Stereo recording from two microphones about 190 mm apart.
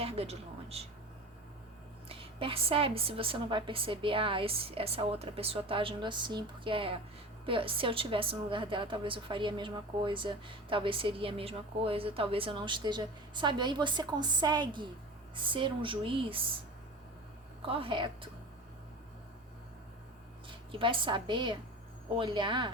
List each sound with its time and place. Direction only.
0.0 s speech: 30° right (ahead or behind)
2.0 s a woman's voice: 30° right (ahead or behind)
17.7 s a woman's voice: 30° right (ahead or behind)
20.7 s a woman's voice: 25° right (ahead or behind)